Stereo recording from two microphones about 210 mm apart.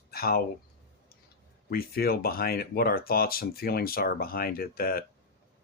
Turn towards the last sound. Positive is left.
turn(degrees=45)  # may be behind; listen again after turning